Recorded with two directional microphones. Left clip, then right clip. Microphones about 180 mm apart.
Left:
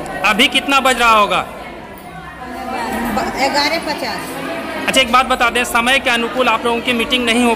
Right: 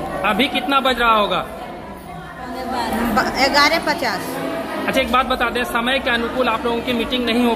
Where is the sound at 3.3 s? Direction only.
Centre (ahead or behind).